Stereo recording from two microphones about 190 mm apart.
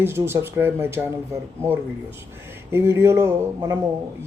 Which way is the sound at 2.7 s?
15° right (ahead or behind).